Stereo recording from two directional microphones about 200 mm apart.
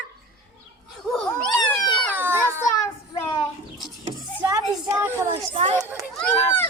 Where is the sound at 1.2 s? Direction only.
15° left (ahead or behind).